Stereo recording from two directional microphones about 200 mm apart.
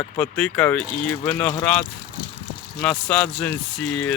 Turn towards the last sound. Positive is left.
turn(degrees=5)  # may be behind; listen again after turning